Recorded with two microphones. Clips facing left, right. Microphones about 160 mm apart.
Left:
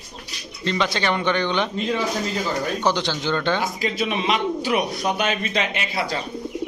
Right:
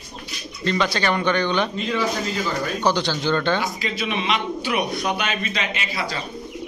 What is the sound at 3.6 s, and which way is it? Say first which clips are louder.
Speech: left 2 dB; 45° left (ahead or behind).